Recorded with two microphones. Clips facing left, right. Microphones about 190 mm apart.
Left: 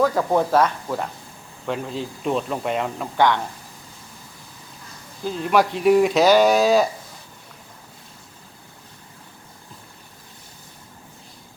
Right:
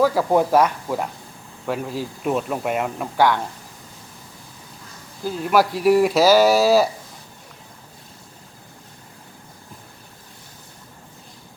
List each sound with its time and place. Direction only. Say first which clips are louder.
0.0 s speech: right 2 dB; 5° right (ahead or behind)
5.2 s speech: right 1 dB; 5° right (ahead or behind)